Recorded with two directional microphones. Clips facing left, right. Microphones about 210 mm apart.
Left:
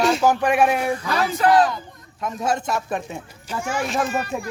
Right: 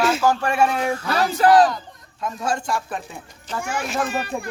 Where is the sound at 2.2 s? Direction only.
20° left (ahead or behind).